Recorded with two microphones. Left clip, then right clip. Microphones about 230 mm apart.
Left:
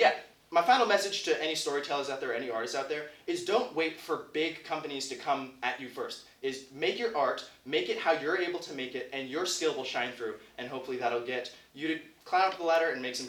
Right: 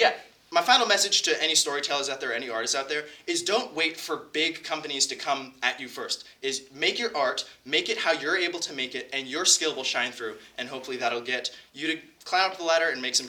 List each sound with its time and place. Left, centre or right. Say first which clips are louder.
0.5 s speech: right 3 dB; right